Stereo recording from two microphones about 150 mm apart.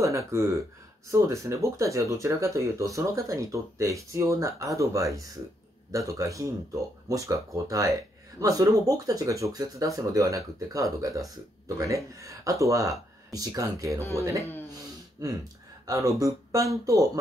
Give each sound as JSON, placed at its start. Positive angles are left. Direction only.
{"t": 0.0, "sound": "speech", "side_deg": -20}